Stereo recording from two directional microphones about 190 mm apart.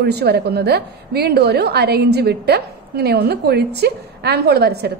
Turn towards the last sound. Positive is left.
turn(degrees=-60)  # may be behind; listen again after turning